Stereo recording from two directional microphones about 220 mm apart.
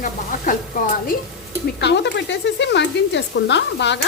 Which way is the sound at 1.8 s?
50° left (ahead or behind).